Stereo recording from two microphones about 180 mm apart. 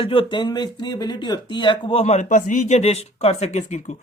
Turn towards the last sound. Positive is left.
turn(degrees=40)  # may be behind; listen again after turning